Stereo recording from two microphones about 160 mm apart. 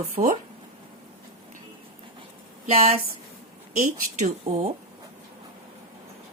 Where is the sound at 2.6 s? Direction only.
40° right (ahead or behind).